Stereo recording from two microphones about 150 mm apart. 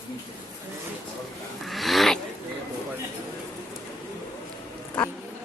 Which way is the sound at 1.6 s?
Centre (ahead or behind).